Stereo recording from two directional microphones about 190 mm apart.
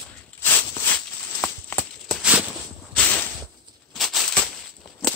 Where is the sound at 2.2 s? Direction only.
5° right (ahead or behind).